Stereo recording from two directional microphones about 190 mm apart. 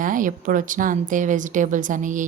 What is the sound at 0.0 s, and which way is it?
Speech, 45° right (ahead or behind).